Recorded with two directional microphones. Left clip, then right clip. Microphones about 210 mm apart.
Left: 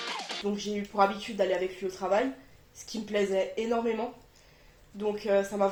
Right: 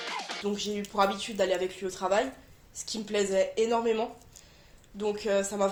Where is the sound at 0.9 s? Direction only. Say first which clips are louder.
Left 1 dB; 40° right (ahead or behind).